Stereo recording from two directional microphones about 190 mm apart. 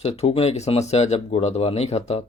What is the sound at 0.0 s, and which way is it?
Speech, 30° left (ahead or behind).